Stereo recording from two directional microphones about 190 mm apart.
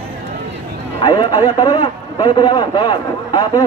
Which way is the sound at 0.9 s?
25° left (ahead or behind).